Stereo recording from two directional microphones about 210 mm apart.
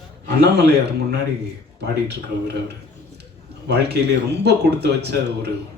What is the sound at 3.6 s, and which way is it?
A man's voice, 50° right (ahead or behind).